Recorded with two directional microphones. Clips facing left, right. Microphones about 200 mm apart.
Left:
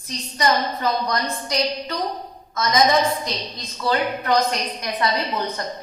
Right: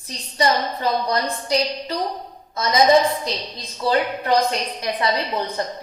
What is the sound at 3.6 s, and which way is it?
Speech, 30° right (ahead or behind).